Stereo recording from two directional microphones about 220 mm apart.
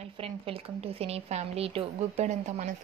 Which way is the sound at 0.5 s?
25° right (ahead or behind).